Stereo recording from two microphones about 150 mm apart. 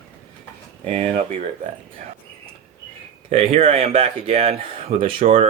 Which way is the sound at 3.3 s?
45° right (ahead or behind).